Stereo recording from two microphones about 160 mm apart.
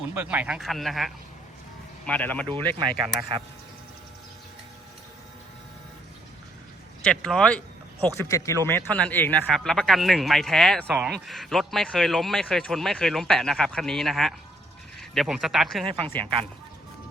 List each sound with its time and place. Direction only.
0.1 s speech: 10° right (ahead or behind); by 2.5 s 10° left (ahead or behind)
2.7 s speech: 30° right (ahead or behind)
7.0 s speech: 5° left (ahead or behind)
8.2 s speech: 20° left (ahead or behind); by 15.8 s centre (ahead or behind)
15.9 s speech: 35° right (ahead or behind)